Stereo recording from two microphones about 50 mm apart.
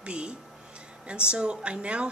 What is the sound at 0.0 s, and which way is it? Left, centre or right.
Speech, right.